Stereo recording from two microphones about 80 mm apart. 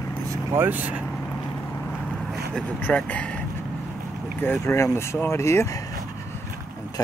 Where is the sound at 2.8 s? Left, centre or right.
Centre.